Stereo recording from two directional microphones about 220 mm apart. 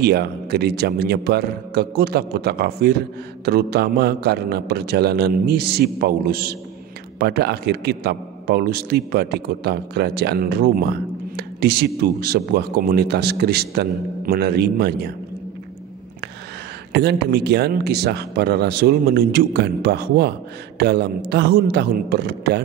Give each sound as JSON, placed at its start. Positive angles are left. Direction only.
{"t": 0.0, "sound": "a man's voice", "side_deg": -45}
{"t": 16.9, "sound": "a man's voice", "side_deg": -50}